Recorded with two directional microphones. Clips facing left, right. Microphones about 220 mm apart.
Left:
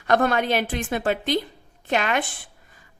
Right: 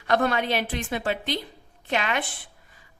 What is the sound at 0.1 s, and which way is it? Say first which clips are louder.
A woman's voice: left 3 dB; 50° left (ahead or behind).